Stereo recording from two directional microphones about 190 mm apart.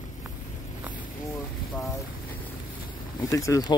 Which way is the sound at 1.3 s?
15° left (ahead or behind).